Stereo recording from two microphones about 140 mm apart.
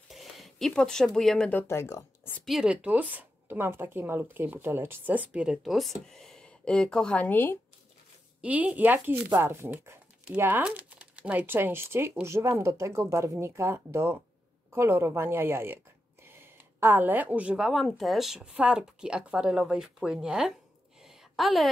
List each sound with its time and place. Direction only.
0.1 s speech: centre (ahead or behind); by 2.3 s 20° left (ahead or behind)
2.3 s speech: centre (ahead or behind)
8.4 s speech: 10° right (ahead or behind)
21.0 s a sound: 5° right (ahead or behind)